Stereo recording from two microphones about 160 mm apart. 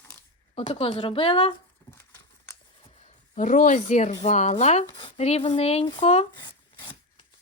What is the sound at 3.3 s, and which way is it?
Speech, 50° left (ahead or behind).